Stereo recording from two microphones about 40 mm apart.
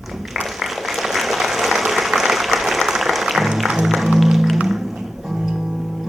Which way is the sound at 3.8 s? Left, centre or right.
Centre.